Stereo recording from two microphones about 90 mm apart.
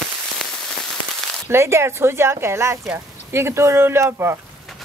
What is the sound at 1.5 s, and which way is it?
Speech, 30° right (ahead or behind).